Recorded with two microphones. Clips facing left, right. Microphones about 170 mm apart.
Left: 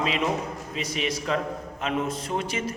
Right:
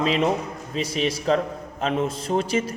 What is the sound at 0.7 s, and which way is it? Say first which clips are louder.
A man's voice: right 5 dB; 30° right (ahead or behind).